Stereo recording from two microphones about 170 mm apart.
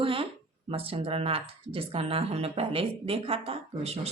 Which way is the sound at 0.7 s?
35° right (ahead or behind).